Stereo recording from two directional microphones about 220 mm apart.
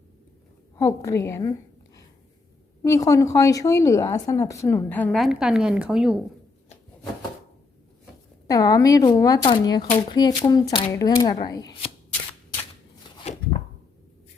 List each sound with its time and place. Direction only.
0.8 s a woman's voice: 15° left (ahead or behind)
2.8 s a woman's voice: 15° left (ahead or behind); by 6.2 s 5° right (ahead or behind)
8.4 s a woman's voice: 15° left (ahead or behind)
13.2 s a sound: 30° left (ahead or behind)